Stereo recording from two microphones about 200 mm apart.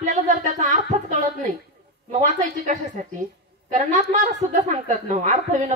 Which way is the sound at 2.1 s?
35° right (ahead or behind).